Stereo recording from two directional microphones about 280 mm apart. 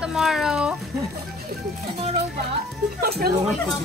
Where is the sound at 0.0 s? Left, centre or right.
Centre.